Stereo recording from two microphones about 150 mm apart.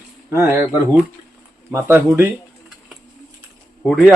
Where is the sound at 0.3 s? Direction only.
15° right (ahead or behind).